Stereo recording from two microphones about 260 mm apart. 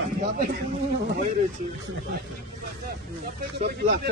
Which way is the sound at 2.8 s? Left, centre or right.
Right.